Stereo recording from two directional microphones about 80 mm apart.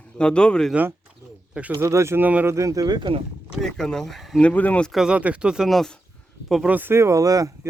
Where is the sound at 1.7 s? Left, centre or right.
Right.